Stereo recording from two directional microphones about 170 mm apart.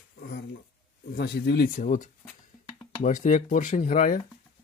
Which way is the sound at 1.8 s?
50° left (ahead or behind).